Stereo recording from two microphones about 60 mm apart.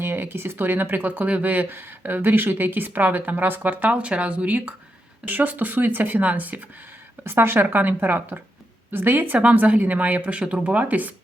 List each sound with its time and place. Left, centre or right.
0.0 s speech: right
7.3 s speech: right